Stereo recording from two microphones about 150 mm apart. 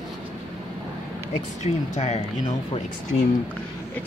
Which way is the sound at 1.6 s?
50° left (ahead or behind).